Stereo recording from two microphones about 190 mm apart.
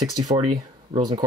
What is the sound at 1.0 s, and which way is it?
Speech, 25° right (ahead or behind).